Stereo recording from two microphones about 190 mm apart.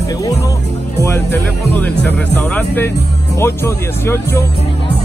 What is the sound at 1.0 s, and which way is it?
Speech, 10° left (ahead or behind).